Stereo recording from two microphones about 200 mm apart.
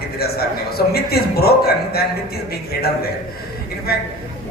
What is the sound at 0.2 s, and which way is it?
A man's voice, 50° left (ahead or behind).